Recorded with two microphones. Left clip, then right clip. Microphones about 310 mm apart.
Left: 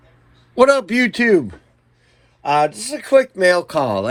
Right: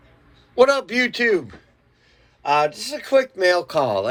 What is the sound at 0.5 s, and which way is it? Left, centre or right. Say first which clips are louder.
Speech: left 3 dB; centre.